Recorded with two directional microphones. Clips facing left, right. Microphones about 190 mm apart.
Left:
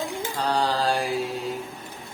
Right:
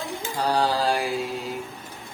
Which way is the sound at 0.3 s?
10° right (ahead or behind).